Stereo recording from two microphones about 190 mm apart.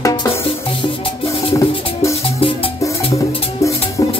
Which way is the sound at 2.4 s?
30° left (ahead or behind).